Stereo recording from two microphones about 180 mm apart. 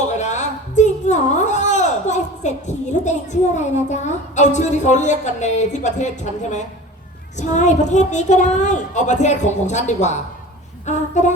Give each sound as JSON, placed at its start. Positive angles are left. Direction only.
{"t": 0.1, "sound": "a woman's voice", "side_deg": 40}